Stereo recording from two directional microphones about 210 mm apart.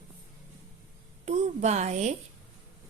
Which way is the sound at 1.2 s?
30° right (ahead or behind).